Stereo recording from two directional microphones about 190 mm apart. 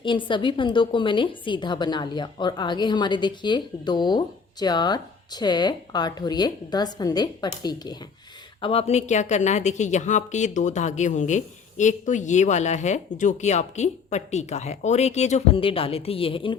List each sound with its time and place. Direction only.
0.0 s a woman's voice: 25° left (ahead or behind)
8.6 s a woman's voice: 30° left (ahead or behind)